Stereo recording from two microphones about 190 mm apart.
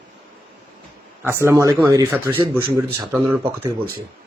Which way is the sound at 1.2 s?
10° right (ahead or behind).